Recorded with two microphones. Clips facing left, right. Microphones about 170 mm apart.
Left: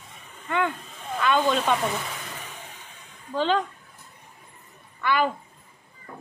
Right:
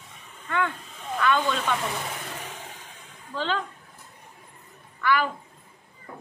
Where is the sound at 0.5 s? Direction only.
20° left (ahead or behind).